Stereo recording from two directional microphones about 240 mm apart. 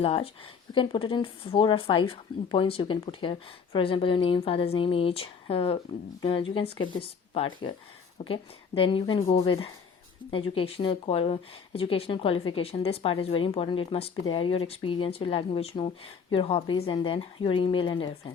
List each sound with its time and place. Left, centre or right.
0.0 s speech: left